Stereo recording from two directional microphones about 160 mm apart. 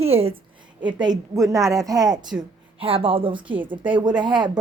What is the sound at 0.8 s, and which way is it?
A woman's voice, 30° right (ahead or behind).